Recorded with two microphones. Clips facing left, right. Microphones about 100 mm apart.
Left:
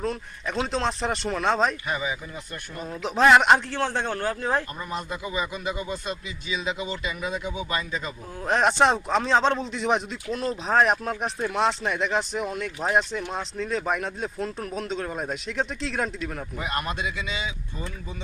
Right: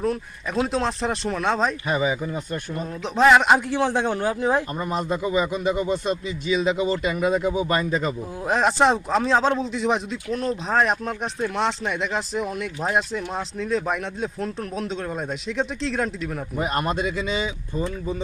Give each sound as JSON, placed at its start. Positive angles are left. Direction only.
{"t": 0.0, "sound": "speech", "side_deg": -5}
{"t": 1.9, "sound": "speech", "side_deg": -30}
{"t": 2.7, "sound": "speech", "side_deg": 0}
{"t": 3.7, "sound": "a man's voice", "side_deg": -15}
{"t": 4.8, "sound": "speech", "side_deg": -35}
{"t": 8.4, "sound": "speech", "side_deg": 0}
{"t": 16.6, "sound": "speech", "side_deg": -40}